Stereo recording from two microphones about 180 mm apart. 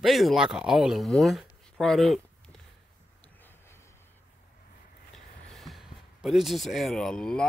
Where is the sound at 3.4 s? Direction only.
10° left (ahead or behind).